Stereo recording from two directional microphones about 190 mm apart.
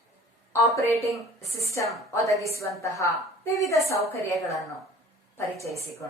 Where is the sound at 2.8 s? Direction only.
15° left (ahead or behind).